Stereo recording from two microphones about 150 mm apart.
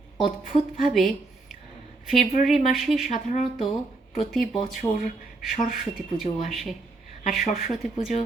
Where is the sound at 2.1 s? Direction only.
Centre (ahead or behind).